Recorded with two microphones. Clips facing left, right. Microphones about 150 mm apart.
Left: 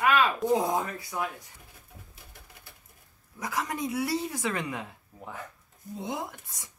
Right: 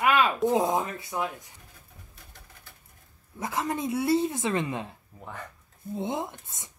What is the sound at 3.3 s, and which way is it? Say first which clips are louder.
Speech: right 2 dB; 25° right (ahead or behind).